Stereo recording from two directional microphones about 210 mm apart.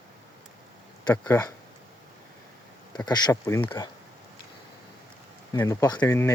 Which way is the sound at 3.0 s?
20° left (ahead or behind).